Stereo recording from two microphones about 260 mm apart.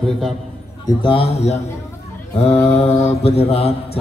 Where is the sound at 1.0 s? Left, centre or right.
Left.